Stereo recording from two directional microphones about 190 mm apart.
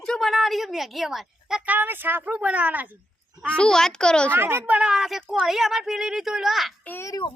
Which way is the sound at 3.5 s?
5° left (ahead or behind).